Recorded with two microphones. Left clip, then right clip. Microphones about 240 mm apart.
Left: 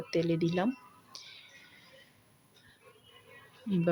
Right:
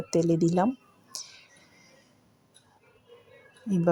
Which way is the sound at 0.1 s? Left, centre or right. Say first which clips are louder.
Right 6 dB; centre.